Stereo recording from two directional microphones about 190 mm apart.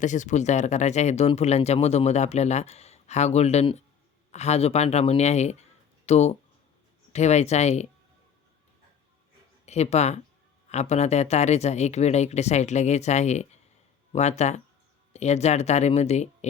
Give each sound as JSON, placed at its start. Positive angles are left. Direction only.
{"t": 0.0, "sound": "speech", "side_deg": 40}
{"t": 9.6, "sound": "speech", "side_deg": 35}